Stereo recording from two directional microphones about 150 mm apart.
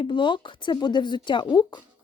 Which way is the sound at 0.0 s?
35° left (ahead or behind).